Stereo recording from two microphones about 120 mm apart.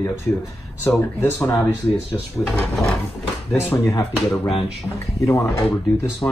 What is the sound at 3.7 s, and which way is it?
Speech, 20° left (ahead or behind).